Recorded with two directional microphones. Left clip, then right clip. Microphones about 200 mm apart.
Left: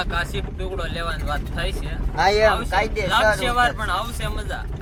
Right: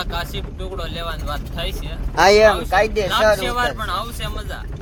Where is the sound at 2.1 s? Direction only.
45° right (ahead or behind).